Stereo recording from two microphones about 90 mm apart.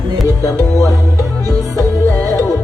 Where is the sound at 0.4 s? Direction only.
40° left (ahead or behind).